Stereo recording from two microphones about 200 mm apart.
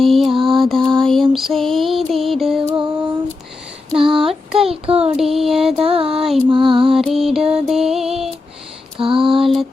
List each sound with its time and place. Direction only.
0.0 s lullaby: centre (ahead or behind)
3.9 s a sound: 25° right (ahead or behind)
5.1 s music: centre (ahead or behind)
5.7 s music: 30° right (ahead or behind)
6.2 s music: centre (ahead or behind)
6.5 s music: 25° right (ahead or behind)
6.9 s music: centre (ahead or behind)
9.0 s female singing: 25° right (ahead or behind)